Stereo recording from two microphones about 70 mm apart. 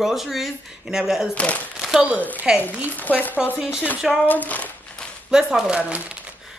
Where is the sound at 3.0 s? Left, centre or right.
Left.